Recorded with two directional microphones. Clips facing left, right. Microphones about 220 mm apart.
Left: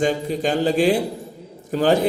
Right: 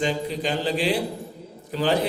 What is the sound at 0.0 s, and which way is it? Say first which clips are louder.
A man's voice: left 5 dB; 45° left (ahead or behind).